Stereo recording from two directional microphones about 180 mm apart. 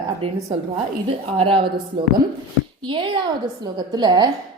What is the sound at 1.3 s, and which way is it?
Speech, 30° right (ahead or behind).